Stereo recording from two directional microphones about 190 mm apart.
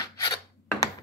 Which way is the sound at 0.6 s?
10° left (ahead or behind).